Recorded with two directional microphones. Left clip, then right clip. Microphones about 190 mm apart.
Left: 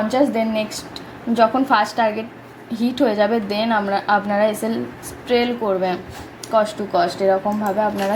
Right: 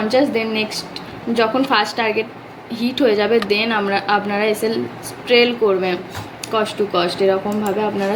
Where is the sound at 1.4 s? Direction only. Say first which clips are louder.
Left 1 dB; 30° left (ahead or behind).